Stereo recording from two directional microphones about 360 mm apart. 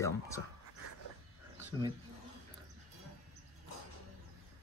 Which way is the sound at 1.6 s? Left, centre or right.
Centre.